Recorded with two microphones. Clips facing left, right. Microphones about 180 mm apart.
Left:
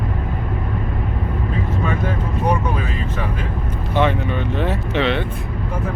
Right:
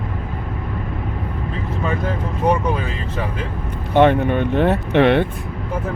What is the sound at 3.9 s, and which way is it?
Speech, 60° right (ahead or behind).